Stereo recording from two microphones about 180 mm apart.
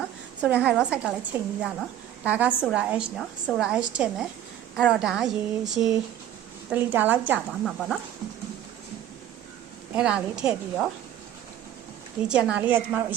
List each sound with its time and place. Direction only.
0.4 s a woman's voice: 5° right (ahead or behind)
9.9 s a woman's voice: 5° right (ahead or behind)
12.3 s a woman's voice: 5° right (ahead or behind)